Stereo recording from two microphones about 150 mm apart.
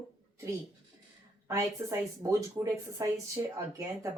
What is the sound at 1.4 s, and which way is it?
Speech, 20° right (ahead or behind).